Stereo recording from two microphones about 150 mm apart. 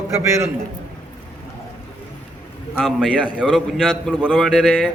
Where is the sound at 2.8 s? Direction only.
5° right (ahead or behind).